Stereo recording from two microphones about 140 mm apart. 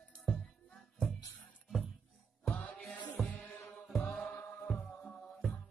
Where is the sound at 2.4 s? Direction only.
5° left (ahead or behind).